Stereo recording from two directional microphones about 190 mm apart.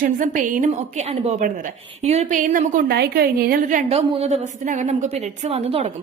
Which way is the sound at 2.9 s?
55° right (ahead or behind).